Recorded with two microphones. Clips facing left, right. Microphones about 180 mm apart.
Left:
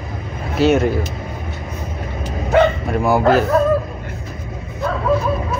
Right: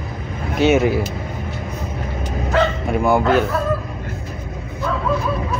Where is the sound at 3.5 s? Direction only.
40° left (ahead or behind).